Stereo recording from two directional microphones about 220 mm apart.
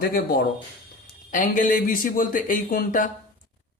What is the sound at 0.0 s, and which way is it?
A man's voice, 45° left (ahead or behind).